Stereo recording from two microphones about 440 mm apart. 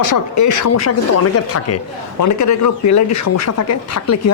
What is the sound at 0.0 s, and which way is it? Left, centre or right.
Speech, left.